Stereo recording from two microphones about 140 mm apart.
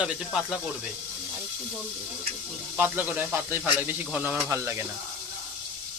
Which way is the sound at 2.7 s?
15° right (ahead or behind).